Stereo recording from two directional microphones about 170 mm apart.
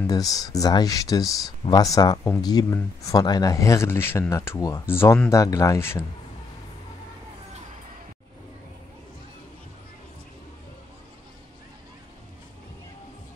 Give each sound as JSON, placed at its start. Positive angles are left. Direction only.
{"t": 0.0, "sound": "speech", "side_deg": 20}